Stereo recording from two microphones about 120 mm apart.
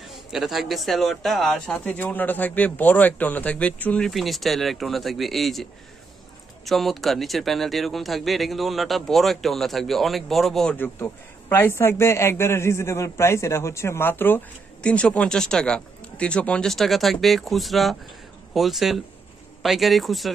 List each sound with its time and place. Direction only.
0.0 s a man's voice: centre (ahead or behind)
10.8 s a man's voice: 20° left (ahead or behind); by 20.3 s centre (ahead or behind)